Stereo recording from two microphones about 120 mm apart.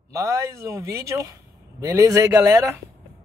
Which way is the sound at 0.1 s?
25° right (ahead or behind).